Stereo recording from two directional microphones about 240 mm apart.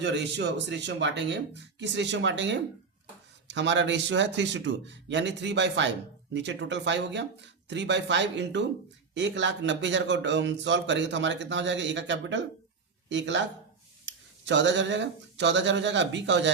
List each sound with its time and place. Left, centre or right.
0.0 s a man's voice: right